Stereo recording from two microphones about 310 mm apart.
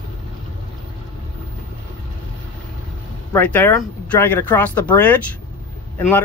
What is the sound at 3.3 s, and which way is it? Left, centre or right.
Speech, centre.